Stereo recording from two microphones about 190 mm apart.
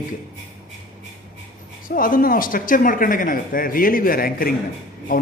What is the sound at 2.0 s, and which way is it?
Speech, 45° left (ahead or behind).